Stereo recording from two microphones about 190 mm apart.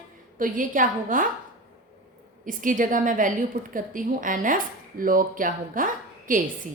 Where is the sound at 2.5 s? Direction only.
45° right (ahead or behind).